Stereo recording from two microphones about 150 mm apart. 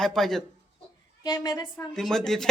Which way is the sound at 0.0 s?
5° left (ahead or behind).